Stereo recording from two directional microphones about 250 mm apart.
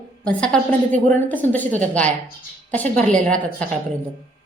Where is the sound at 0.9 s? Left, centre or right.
Right.